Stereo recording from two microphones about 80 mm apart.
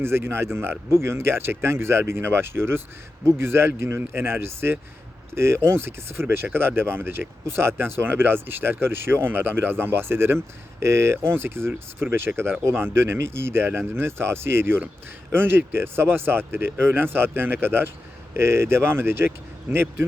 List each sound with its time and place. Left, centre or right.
0.0 s speech: right